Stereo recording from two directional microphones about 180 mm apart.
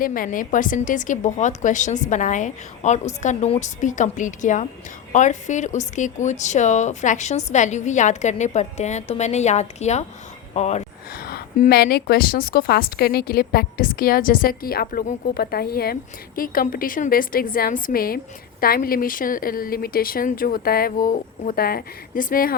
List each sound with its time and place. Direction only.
0.0 s a woman's voice: 50° left (ahead or behind)
11.1 s a woman's voice: 55° left (ahead or behind)